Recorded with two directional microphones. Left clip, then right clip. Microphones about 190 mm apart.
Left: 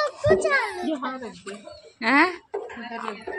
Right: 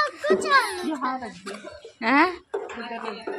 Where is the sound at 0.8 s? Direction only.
5° left (ahead or behind).